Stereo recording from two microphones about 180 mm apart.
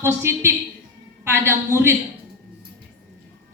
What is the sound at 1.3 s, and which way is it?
Speech, 15° right (ahead or behind).